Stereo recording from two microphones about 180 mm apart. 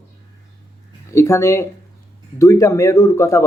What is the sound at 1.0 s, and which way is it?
Speech, 15° left (ahead or behind).